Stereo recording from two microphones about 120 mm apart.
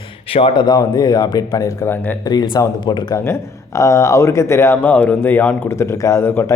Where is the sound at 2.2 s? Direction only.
35° left (ahead or behind).